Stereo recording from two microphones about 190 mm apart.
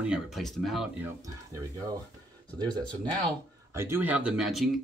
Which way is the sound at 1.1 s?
20° right (ahead or behind).